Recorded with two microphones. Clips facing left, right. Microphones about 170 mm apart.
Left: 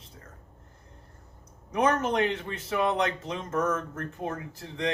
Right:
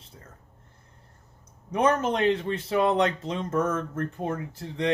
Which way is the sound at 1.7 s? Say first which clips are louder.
Right 2 dB; 30° right (ahead or behind).